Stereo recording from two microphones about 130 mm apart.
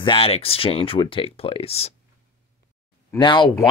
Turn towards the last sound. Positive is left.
turn(degrees=35)  # may be behind; listen again after turning